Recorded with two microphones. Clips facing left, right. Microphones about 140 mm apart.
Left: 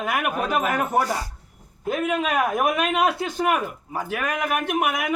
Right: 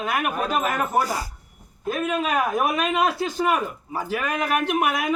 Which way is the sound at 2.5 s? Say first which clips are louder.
Even; 10° left (ahead or behind).